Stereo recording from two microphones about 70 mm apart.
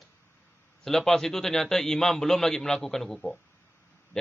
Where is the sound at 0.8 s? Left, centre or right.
Centre.